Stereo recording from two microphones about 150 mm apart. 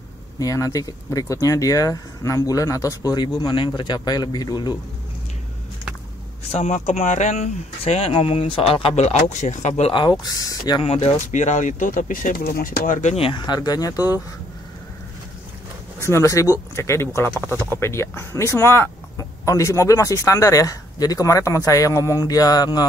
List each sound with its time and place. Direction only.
0.4 s speech: 20° left (ahead or behind)
6.5 s speech: 50° left (ahead or behind); by 10.9 s 30° left (ahead or behind)
10.9 s speech: 45° left (ahead or behind); by 14.2 s 25° left (ahead or behind)
16.0 s speech: 20° left (ahead or behind)